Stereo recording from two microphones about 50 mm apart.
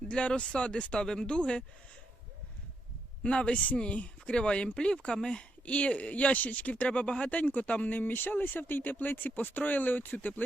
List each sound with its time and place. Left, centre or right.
0.1 s speech: left
3.2 s speech: left